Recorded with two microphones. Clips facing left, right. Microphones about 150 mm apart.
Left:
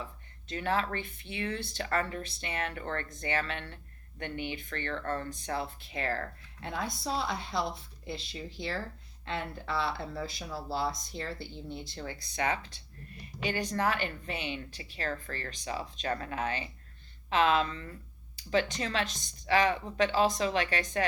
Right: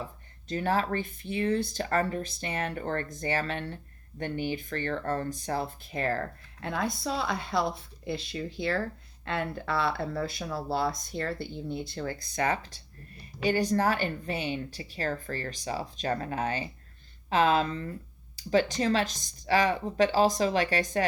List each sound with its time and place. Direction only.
0.4 s speech: 40° right (ahead or behind)